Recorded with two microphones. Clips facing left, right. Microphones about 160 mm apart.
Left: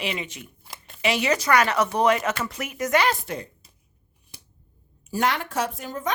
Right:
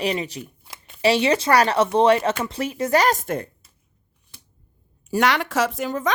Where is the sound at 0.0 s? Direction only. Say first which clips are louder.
Right 6 dB; 35° right (ahead or behind).